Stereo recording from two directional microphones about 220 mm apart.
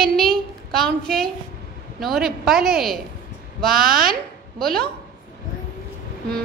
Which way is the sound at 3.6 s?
40° right (ahead or behind).